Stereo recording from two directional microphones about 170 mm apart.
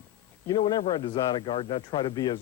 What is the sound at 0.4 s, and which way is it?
Speech, 25° left (ahead or behind).